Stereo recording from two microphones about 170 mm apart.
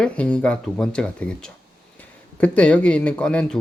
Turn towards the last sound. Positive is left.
turn(degrees=5)  # may be behind; listen again after turning